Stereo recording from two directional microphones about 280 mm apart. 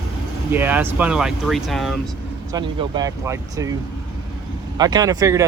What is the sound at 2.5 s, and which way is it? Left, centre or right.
Speech, centre.